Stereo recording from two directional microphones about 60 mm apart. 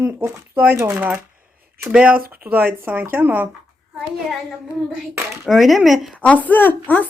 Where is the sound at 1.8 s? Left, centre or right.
Centre; by 3.5 s right.